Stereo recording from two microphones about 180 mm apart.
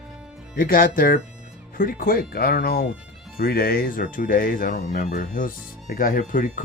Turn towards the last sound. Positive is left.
turn(degrees=45)  # may be behind; listen again after turning